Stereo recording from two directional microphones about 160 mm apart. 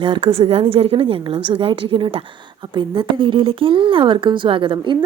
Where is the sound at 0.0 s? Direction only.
35° right (ahead or behind).